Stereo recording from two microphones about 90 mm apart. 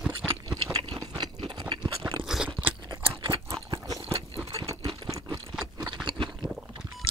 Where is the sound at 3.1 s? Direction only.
70° right (ahead or behind).